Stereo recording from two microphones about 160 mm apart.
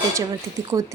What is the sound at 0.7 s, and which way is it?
Speech, 25° right (ahead or behind).